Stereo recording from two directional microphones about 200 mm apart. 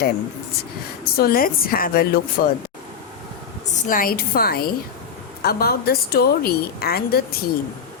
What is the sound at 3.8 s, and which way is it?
A woman's voice, 45° left (ahead or behind).